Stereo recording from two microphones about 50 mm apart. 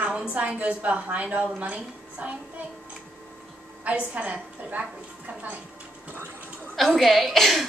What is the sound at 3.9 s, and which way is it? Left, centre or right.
A woman's voice, right.